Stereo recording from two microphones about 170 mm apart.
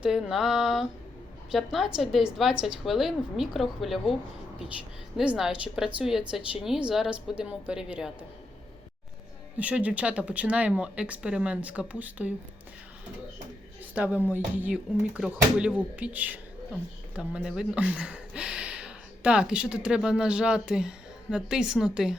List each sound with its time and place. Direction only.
0.0 s speech: centre (ahead or behind)
5.1 s speech: 5° right (ahead or behind)
9.6 s speech: 10° right (ahead or behind)
13.9 s speech: 10° right (ahead or behind)